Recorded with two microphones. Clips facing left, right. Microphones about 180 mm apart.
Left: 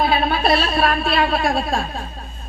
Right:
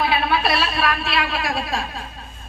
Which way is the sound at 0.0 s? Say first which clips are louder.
Left 2 dB; 40° left (ahead or behind).